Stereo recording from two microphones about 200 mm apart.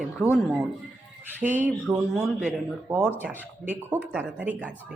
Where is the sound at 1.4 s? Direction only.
40° right (ahead or behind).